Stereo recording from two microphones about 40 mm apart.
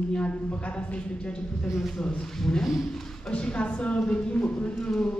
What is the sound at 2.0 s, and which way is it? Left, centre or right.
Speech, centre.